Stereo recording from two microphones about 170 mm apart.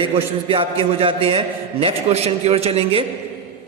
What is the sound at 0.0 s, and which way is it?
A man's voice, 30° right (ahead or behind).